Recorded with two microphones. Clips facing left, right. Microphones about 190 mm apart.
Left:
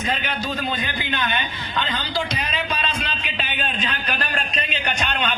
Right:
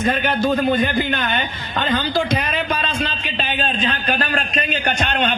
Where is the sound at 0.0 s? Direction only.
55° right (ahead or behind).